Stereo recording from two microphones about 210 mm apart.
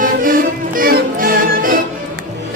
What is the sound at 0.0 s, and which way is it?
Music, 40° right (ahead or behind).